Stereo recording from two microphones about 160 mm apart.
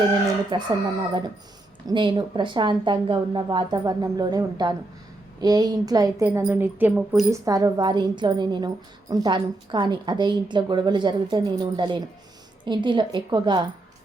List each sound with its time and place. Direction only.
0.5 s a woman's voice: 30° right (ahead or behind)
1.9 s a woman's voice: 30° right (ahead or behind)